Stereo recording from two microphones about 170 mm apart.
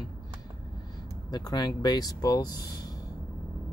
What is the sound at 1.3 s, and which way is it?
Speech, 25° left (ahead or behind).